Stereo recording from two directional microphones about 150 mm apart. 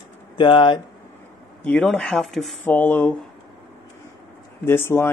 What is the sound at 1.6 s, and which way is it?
Speech, 10° left (ahead or behind).